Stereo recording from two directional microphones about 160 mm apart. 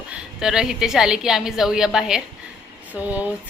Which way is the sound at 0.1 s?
5° right (ahead or behind).